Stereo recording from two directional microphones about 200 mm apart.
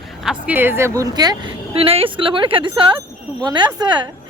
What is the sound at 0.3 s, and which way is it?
A woman's voice, 10° right (ahead or behind).